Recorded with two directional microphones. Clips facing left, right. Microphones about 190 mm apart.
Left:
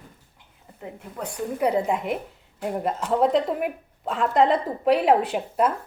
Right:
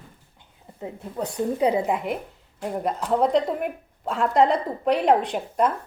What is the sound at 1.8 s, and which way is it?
A woman's voice, centre (ahead or behind).